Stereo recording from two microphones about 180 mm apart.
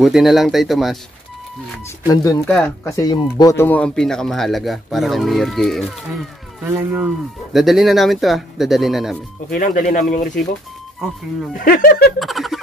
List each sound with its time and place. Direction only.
0.0 s speech: centre (ahead or behind)
2.0 s speech: 15° left (ahead or behind); by 9.2 s centre (ahead or behind)
9.5 s speech: 50° left (ahead or behind)
11.5 s speech: 50° left (ahead or behind)
12.2 s a sound: centre (ahead or behind)